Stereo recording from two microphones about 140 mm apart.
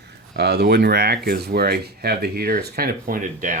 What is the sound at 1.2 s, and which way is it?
Speech, 90° right.